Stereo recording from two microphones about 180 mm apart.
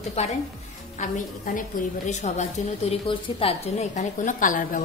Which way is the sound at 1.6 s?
40° left (ahead or behind).